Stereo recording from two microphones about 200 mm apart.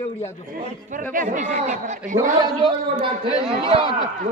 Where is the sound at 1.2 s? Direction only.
40° right (ahead or behind).